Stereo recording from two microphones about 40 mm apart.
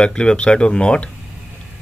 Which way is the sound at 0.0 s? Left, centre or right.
Left.